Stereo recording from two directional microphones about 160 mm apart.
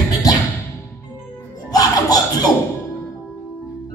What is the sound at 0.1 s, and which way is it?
Music, 25° left (ahead or behind).